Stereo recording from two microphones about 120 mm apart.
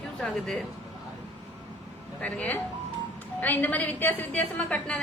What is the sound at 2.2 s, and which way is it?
A woman's voice, 10° left (ahead or behind).